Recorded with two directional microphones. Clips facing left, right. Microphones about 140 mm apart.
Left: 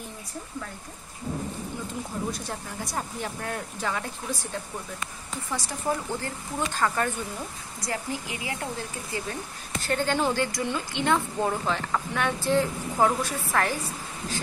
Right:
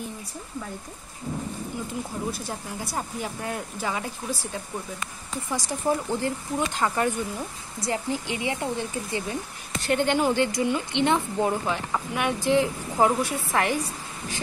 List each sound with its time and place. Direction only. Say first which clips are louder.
2.3 s speech: right 1 dB; 5° right (ahead or behind)
5.5 s speech: right 3 dB; 15° right (ahead or behind)